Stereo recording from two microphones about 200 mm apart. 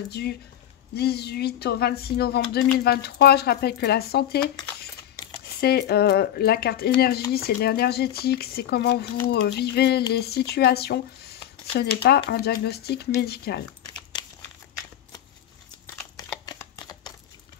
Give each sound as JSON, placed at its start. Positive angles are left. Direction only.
{"t": 0.1, "sound": "speech", "side_deg": 55}
{"t": 15.9, "sound": "a sound", "side_deg": 10}
{"t": 16.4, "sound": "typing", "side_deg": 20}